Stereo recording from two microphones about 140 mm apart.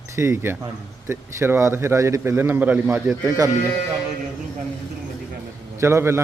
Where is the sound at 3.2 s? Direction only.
25° right (ahead or behind).